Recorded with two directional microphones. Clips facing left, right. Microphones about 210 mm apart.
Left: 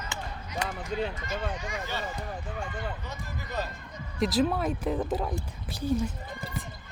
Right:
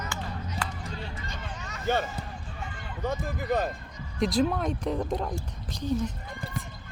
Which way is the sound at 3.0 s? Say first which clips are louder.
Right 10 dB; 55° right (ahead or behind).